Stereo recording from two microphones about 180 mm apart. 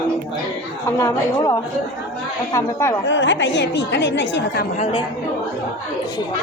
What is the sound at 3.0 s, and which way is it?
A woman's voice, 90° left.